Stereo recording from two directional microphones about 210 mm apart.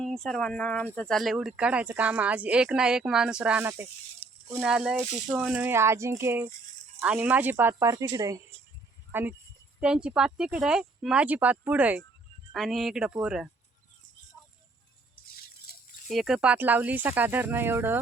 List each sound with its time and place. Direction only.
0.0 s speech: 5° left (ahead or behind)
15.1 s music: 45° left (ahead or behind)
16.0 s speech: centre (ahead or behind)